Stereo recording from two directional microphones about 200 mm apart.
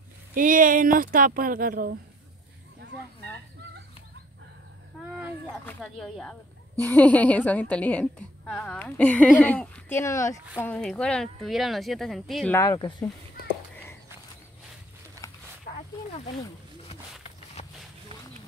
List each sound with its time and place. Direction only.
0.3 s speech: 40° right (ahead or behind)
5.7 s a woman's voice: centre (ahead or behind)
12.5 s speech: 20° left (ahead or behind)
15.2 s wild animals: 15° left (ahead or behind)
17.6 s a sound: 30° left (ahead or behind)